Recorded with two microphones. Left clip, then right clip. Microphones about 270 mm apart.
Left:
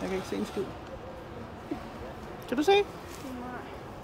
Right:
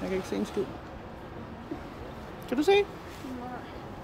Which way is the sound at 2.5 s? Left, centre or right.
Centre.